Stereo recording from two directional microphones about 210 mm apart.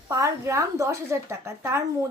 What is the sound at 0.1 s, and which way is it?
Speech, 15° right (ahead or behind).